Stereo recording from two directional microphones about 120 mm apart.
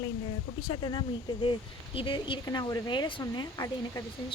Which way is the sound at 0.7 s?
40° left (ahead or behind).